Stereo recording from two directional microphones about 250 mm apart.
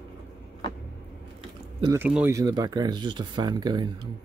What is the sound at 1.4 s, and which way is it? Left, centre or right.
Biting, right.